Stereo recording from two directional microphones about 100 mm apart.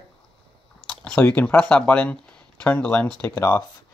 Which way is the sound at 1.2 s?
15° left (ahead or behind).